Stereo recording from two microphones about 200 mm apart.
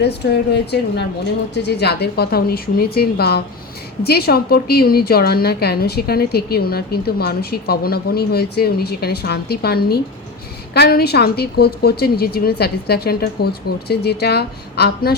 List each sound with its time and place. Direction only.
0.0 s a woman's voice: 55° left (ahead or behind)